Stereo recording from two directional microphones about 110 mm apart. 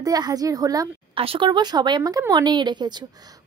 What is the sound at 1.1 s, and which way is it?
Speech, 55° right (ahead or behind).